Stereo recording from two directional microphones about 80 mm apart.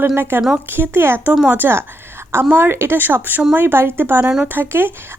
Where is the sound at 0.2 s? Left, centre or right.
Right.